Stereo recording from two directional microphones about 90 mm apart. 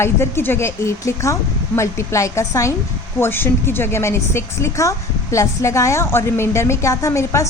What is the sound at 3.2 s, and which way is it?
A woman's voice, 25° left (ahead or behind).